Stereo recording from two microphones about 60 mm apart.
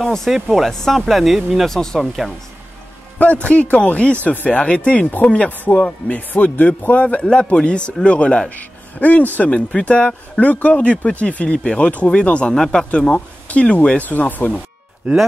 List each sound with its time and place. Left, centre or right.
0.0 s speech: centre
1.8 s speech: centre
3.2 s speech: left
9.7 s speech: centre
12.9 s speech: centre